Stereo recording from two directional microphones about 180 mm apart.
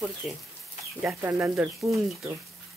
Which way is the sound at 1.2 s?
15° right (ahead or behind).